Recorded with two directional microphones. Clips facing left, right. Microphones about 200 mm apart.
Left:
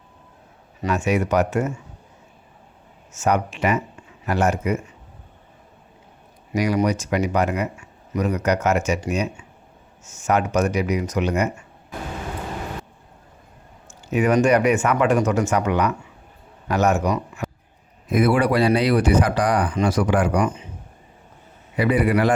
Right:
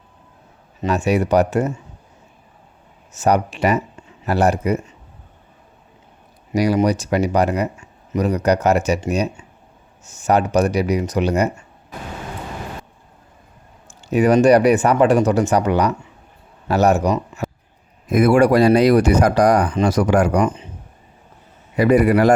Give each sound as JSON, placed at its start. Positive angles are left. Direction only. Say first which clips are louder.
{"t": 0.9, "sound": "speech", "louder": "right 3 dB", "side_deg": -35}
{"t": 3.1, "sound": "speech", "louder": "right 4 dB", "side_deg": -35}
{"t": 6.5, "sound": "speech", "louder": "right 4 dB", "side_deg": -35}
{"t": 14.1, "sound": "speech", "louder": "right 5 dB", "side_deg": -35}
{"t": 21.8, "sound": "speech", "louder": "right 5 dB", "side_deg": -45}